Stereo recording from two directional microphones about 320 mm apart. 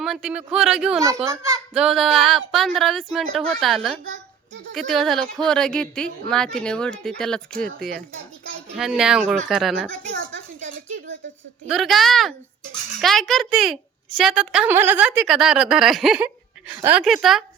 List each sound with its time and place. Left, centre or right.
0.0 s a child's voice: centre
10.1 s a sound: right
11.7 s a child's voice: centre